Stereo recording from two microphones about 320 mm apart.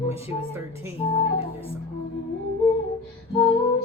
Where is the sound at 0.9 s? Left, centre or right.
Centre.